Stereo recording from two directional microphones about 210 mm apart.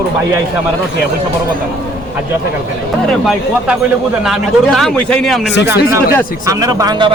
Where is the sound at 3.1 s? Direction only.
Centre (ahead or behind).